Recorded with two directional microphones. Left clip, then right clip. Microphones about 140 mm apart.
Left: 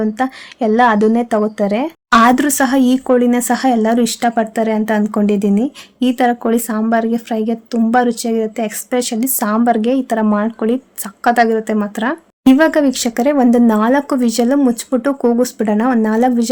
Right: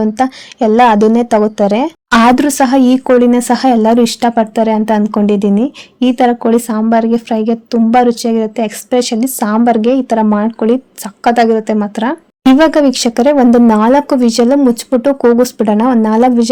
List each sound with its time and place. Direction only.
0.2 s speech: 20° right (ahead or behind)